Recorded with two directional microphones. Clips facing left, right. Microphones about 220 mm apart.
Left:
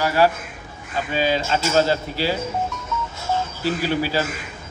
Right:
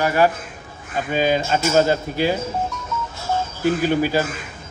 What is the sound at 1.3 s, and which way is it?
Speech, 10° right (ahead or behind).